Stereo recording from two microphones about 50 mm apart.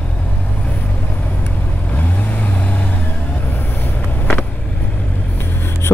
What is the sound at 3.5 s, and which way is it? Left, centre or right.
Vehicle, left.